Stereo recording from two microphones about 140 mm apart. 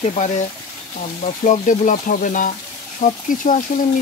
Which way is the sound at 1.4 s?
65° left (ahead or behind).